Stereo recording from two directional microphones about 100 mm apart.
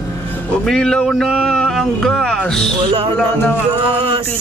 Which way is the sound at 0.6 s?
5° left (ahead or behind).